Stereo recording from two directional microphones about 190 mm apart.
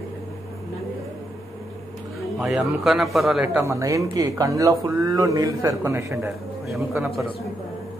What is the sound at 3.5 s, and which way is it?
Speech, 15° right (ahead or behind).